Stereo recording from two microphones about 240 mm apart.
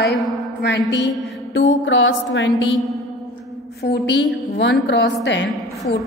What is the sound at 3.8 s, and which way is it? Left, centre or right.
A woman's voice, left.